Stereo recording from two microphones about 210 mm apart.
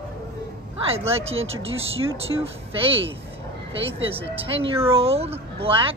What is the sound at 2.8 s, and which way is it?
Speech, 25° right (ahead or behind).